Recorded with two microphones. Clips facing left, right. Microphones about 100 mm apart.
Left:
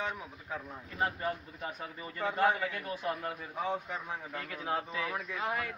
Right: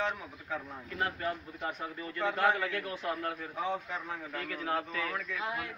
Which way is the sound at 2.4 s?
15° left (ahead or behind).